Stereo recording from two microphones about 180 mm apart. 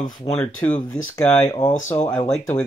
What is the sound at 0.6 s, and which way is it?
Speech, 10° left (ahead or behind).